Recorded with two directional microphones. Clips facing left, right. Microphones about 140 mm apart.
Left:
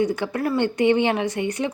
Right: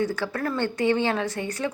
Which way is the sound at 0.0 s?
15° left (ahead or behind).